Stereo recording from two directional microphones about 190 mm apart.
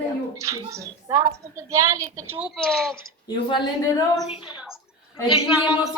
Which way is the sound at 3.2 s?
20° left (ahead or behind).